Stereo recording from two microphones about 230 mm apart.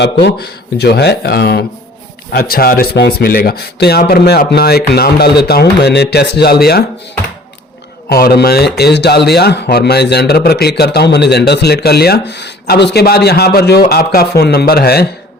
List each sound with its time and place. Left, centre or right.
0.0 s speech: left
8.1 s speech: left